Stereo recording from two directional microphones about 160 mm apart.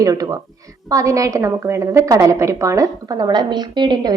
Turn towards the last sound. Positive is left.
turn(degrees=-25)  # may be behind; listen again after turning